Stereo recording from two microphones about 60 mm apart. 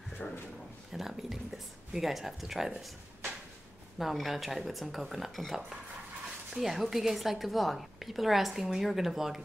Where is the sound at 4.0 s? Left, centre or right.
Centre.